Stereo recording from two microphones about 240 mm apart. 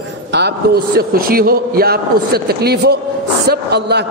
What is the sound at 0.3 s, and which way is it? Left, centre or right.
A man's voice, right.